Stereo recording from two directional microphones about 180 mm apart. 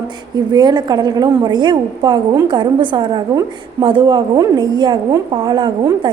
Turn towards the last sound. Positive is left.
turn(degrees=-25)  # may be behind; listen again after turning